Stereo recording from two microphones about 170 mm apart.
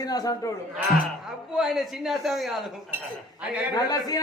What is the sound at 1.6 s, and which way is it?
A man's voice, centre (ahead or behind).